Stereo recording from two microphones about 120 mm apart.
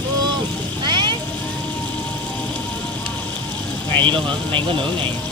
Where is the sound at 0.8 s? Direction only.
40° right (ahead or behind).